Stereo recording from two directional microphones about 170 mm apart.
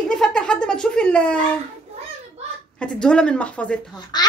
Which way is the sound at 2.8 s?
5° left (ahead or behind).